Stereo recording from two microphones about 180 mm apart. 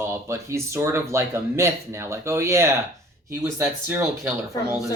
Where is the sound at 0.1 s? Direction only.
15° right (ahead or behind).